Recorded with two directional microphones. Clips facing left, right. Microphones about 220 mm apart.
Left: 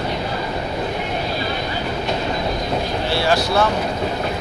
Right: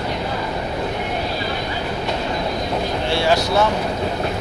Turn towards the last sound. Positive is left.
turn(degrees=-20)  # may be behind; listen again after turning